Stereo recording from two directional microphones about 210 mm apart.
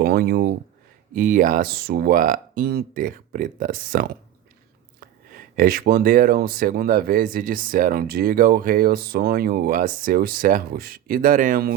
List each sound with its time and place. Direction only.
0.0 s speech: 50° right (ahead or behind)